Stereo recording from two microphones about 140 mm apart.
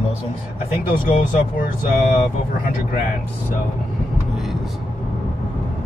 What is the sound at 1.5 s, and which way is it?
Speech, 70° left (ahead or behind).